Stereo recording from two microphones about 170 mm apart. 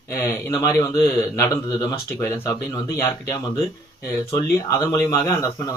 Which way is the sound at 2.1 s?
15° left (ahead or behind).